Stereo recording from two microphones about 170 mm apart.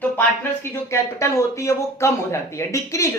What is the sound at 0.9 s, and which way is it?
A woman's voice, 15° left (ahead or behind).